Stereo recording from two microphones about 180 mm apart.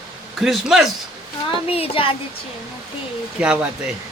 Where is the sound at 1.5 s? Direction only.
30° left (ahead or behind).